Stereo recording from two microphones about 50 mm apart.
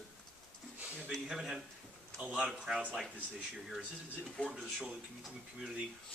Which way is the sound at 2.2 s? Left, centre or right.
Centre.